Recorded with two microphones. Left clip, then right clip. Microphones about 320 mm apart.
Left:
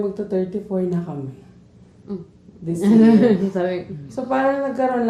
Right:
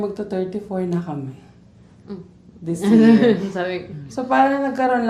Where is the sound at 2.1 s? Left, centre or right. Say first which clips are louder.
Left 3 dB; left.